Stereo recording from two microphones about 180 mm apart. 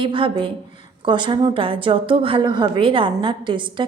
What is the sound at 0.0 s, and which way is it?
A woman's voice, 30° right (ahead or behind).